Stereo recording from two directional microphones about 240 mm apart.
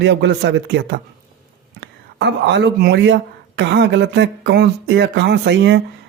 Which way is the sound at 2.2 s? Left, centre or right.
Right.